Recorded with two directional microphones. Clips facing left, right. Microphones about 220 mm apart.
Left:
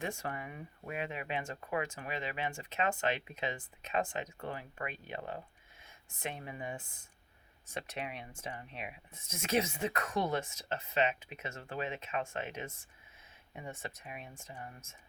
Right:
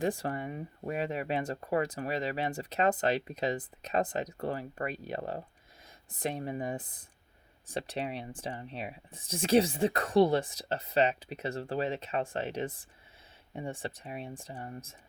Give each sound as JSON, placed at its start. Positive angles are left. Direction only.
{"t": 0.0, "sound": "speech", "side_deg": -35}